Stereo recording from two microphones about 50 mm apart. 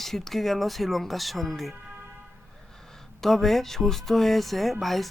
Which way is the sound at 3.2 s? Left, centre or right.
Centre.